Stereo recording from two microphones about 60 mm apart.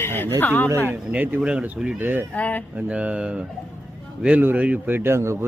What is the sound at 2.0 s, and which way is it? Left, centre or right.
Speech, right.